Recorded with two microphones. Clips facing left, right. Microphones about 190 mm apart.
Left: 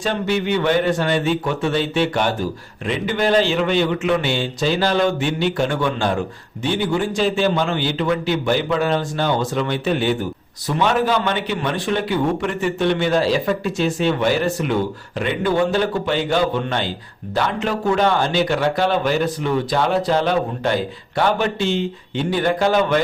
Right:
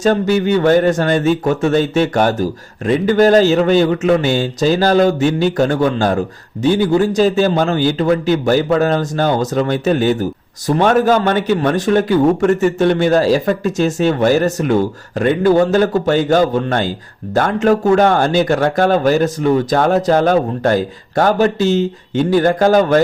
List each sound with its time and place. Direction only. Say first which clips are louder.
0.0 s a man's voice: right 7 dB; 40° right (ahead or behind)